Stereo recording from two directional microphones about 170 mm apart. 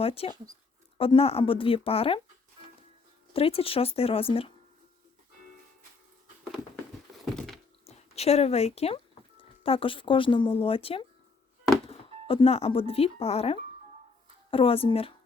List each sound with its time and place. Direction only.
0.0 s speech: 35° left (ahead or behind)
3.3 s speech: 35° left (ahead or behind)
7.3 s thunk: centre (ahead or behind)
7.9 s a woman's voice: 35° left (ahead or behind)